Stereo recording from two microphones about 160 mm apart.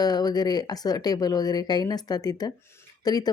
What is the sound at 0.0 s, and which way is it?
A woman's voice, 25° left (ahead or behind).